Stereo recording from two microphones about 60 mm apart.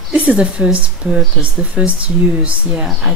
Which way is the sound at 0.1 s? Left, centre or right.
Right.